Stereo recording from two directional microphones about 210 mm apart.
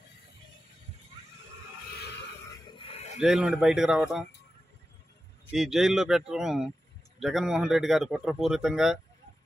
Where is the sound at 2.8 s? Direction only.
30° left (ahead or behind).